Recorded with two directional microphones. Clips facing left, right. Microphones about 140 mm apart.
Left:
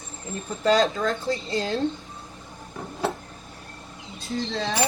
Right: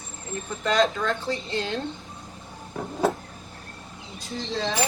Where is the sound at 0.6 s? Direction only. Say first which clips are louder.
Left 2 dB; 35° left (ahead or behind).